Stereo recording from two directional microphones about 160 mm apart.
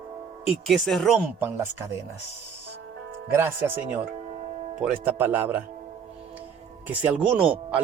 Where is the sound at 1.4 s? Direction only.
15° right (ahead or behind).